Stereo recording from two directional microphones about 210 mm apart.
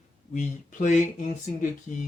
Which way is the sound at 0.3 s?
35° left (ahead or behind).